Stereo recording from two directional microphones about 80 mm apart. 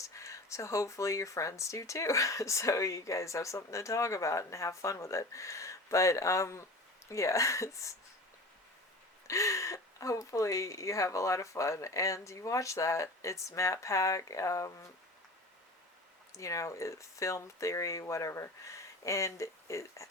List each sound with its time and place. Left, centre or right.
0.1 s speech: left
9.2 s speech: left
16.4 s speech: left